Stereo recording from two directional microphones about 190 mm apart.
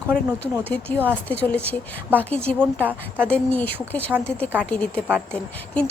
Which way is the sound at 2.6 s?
10° right (ahead or behind).